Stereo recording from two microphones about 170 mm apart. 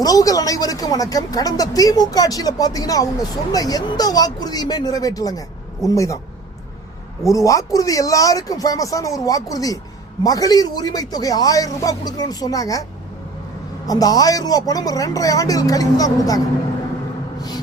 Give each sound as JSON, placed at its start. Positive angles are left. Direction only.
{"t": 0.0, "sound": "speech", "side_deg": 20}
{"t": 7.3, "sound": "speech", "side_deg": 20}
{"t": 13.8, "sound": "speech", "side_deg": 20}